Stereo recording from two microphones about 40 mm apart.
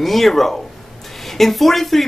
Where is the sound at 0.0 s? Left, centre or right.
Centre.